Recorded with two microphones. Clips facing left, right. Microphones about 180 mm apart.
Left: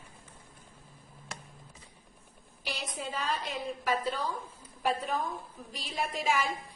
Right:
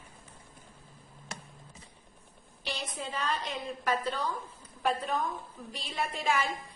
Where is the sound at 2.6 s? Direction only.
10° left (ahead or behind).